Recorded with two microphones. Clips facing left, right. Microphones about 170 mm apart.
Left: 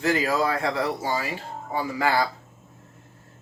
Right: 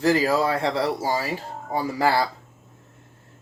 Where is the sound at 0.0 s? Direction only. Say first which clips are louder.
Right 3 dB; 30° right (ahead or behind).